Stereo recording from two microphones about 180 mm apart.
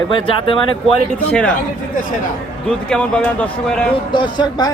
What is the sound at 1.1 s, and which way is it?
Speech, 5° left (ahead or behind).